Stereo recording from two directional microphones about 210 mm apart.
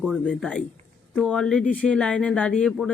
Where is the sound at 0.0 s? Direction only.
Centre (ahead or behind).